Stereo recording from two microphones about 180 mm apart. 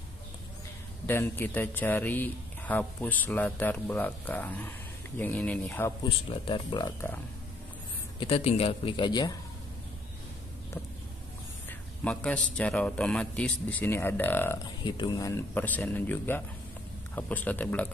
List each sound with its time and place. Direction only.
1.0 s a man's voice: 10° left (ahead or behind)
6.0 s a man's voice: 30° left (ahead or behind)
8.2 s a man's voice: 35° left (ahead or behind)
12.0 s a man's voice: 5° left (ahead or behind)
14.9 s a man's voice: 25° left (ahead or behind); by 17.8 s 10° left (ahead or behind)